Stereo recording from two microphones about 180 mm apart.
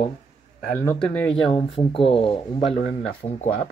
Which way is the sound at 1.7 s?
30° left (ahead or behind).